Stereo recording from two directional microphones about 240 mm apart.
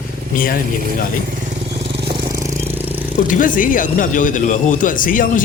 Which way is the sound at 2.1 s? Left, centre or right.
Centre.